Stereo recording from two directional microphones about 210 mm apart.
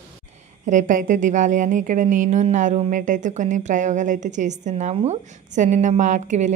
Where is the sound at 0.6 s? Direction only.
35° right (ahead or behind).